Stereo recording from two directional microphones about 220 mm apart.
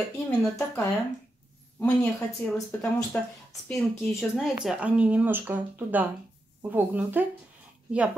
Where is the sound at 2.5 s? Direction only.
5° left (ahead or behind).